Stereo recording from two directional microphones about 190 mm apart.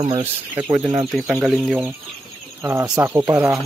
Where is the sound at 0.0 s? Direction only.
35° right (ahead or behind).